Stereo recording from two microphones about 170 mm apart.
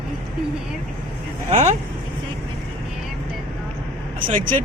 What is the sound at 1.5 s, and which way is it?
Speech, 40° right (ahead or behind).